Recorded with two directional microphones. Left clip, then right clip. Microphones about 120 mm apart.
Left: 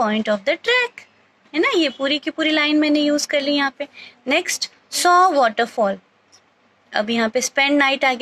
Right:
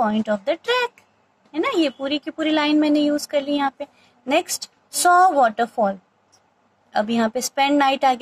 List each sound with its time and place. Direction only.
0.0 s speech: 20° left (ahead or behind)